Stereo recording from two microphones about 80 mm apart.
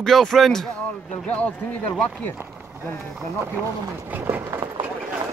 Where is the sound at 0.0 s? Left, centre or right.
Centre.